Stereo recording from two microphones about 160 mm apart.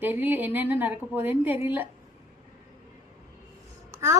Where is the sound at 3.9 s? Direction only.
15° right (ahead or behind).